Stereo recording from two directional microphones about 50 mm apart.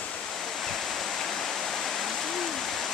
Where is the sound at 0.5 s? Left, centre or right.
Centre.